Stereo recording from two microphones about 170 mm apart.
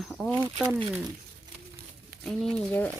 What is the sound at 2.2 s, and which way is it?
Speech, 5° left (ahead or behind).